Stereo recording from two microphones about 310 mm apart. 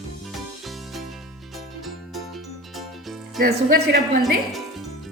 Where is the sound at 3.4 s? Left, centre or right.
Right.